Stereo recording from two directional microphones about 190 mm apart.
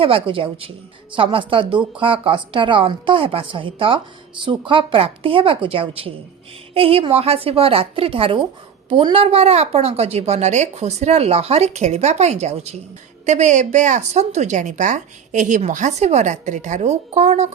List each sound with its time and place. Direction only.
0.0 s a woman's voice: 30° right (ahead or behind)